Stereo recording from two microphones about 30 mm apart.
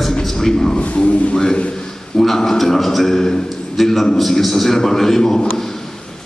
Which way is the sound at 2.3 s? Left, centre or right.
Centre.